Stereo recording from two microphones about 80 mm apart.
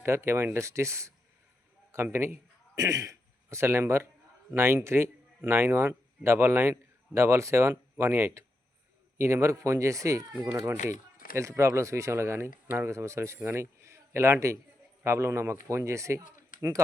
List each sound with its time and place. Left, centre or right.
0.0 s a man's voice: right
2.7 s a man's voice: right